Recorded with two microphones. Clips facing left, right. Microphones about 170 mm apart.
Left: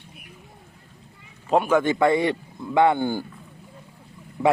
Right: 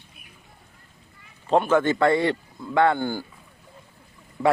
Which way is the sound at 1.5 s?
10° left (ahead or behind).